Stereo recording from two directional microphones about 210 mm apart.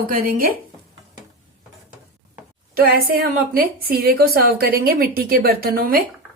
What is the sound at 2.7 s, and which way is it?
A woman's voice, 45° right (ahead or behind).